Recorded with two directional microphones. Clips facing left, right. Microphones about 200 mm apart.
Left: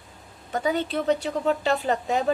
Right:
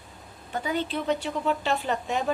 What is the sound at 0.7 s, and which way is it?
Speech, 45° left (ahead or behind).